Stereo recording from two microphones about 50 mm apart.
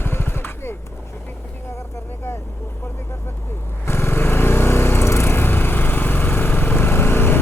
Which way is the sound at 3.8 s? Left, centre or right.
Left.